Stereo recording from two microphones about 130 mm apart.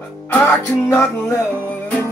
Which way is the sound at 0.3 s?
15° left (ahead or behind).